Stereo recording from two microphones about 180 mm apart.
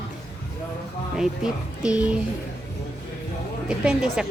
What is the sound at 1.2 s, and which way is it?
Speech, 5° right (ahead or behind).